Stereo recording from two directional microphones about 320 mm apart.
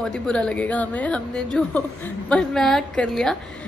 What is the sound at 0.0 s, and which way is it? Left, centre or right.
A woman's voice, centre.